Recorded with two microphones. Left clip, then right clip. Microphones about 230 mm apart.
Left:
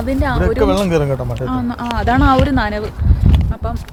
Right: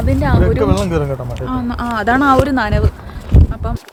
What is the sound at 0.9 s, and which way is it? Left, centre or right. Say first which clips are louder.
Speech: left 2 dB; left.